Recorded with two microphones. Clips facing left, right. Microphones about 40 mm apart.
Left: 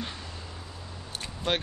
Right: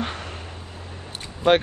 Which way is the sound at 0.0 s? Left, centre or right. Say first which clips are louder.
Right 8 dB; right.